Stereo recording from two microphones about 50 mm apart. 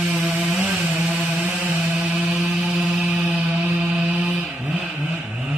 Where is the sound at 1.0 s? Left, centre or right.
Right.